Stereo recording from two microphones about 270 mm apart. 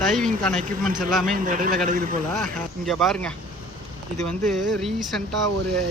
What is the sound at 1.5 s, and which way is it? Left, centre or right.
Speech, right.